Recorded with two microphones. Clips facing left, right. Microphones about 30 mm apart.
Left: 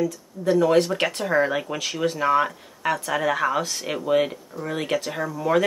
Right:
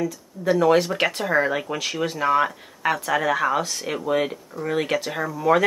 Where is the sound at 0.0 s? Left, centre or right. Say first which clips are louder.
Left 1 dB; centre.